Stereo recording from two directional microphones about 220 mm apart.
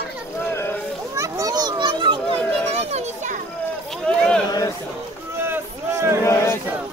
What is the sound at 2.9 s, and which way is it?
Children playing, 30° right (ahead or behind).